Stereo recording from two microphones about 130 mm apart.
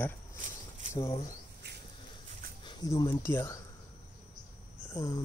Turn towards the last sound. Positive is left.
turn(degrees=30)  # may be behind; listen again after turning